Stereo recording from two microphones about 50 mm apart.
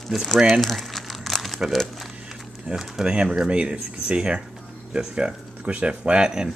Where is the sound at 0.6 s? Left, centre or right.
Centre.